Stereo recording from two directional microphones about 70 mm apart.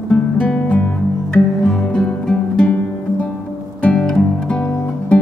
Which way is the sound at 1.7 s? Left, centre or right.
Centre.